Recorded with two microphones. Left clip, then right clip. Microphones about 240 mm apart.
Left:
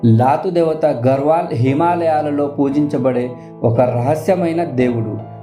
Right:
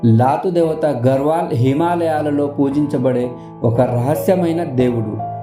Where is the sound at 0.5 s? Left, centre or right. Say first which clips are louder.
Left 1 dB; right.